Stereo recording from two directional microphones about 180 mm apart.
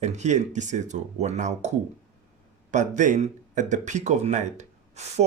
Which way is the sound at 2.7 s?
45° right (ahead or behind).